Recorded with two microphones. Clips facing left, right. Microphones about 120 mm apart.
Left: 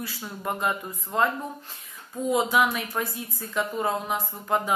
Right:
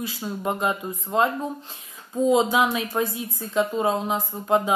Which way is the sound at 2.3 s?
25° right (ahead or behind).